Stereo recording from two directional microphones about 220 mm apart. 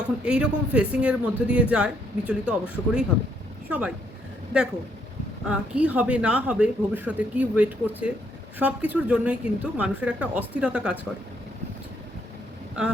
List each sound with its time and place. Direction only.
0.3 s a woman's voice: 5° right (ahead or behind)
5.5 s a woman's voice: 5° right (ahead or behind)